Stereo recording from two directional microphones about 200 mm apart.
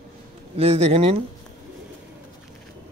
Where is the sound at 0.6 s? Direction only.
30° right (ahead or behind).